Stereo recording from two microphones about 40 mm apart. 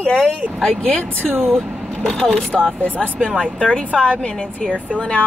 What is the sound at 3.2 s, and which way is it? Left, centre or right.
Speech, centre.